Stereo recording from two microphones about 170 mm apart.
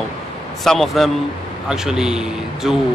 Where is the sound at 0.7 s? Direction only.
Centre (ahead or behind).